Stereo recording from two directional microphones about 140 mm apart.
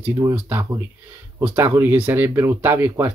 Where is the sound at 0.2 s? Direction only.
20° right (ahead or behind).